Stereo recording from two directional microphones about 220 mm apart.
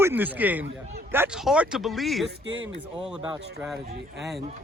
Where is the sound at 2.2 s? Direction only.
55° right (ahead or behind).